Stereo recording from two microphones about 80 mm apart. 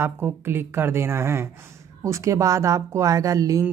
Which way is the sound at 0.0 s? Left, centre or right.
Right.